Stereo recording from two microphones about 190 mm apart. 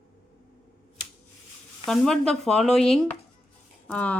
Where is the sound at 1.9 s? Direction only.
5° left (ahead or behind).